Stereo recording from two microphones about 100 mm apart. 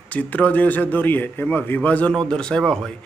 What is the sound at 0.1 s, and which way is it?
A man's voice, 15° left (ahead or behind).